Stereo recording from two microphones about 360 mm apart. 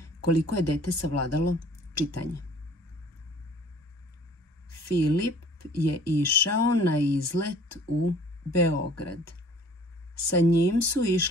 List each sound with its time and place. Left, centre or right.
0.0 s speech: left
4.9 s speech: left